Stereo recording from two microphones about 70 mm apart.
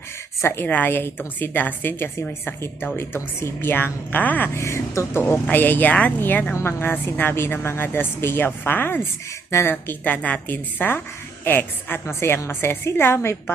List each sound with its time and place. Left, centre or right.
0.4 s a woman's voice: left
4.5 s speech: left
5.5 s a woman's voice: left
10.0 s a woman's voice: left